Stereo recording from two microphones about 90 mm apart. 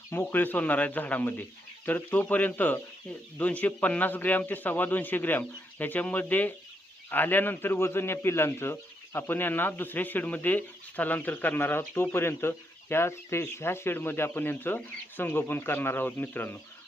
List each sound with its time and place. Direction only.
0.1 s a man's voice: 25° left (ahead or behind)